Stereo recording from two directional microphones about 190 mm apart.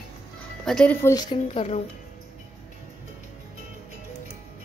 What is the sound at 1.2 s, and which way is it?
Speech, 30° left (ahead or behind).